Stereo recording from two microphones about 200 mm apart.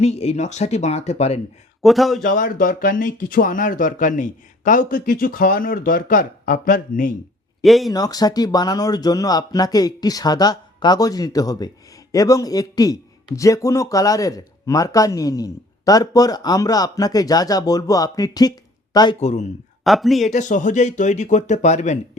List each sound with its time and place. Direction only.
0.0 s speech: 30° left (ahead or behind)
1.8 s speech: centre (ahead or behind)
2.2 s speech: 45° left (ahead or behind)
7.6 s speech: centre (ahead or behind)
7.9 s speech: 20° left (ahead or behind)
19.2 s speech: 35° left (ahead or behind)
19.8 s speech: centre (ahead or behind)
20.3 s speech: 40° left (ahead or behind)